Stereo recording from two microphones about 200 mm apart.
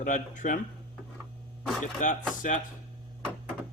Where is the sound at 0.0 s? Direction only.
40° left (ahead or behind).